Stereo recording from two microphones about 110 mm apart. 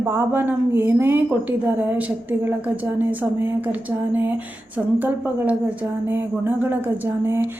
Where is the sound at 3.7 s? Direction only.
15° right (ahead or behind).